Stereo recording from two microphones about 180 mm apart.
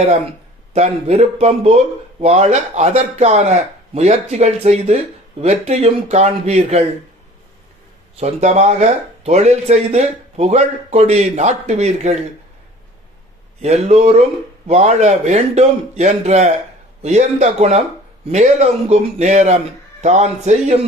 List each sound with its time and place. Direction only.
0.7 s speech: 35° right (ahead or behind)
8.1 s speech: 40° right (ahead or behind)
13.6 s speech: 40° right (ahead or behind)